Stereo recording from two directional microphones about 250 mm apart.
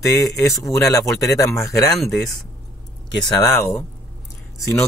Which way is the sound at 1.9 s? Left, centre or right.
Centre.